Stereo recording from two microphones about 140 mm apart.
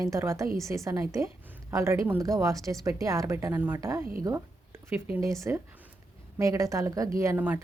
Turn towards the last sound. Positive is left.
turn(degrees=-10)  # may be behind; listen again after turning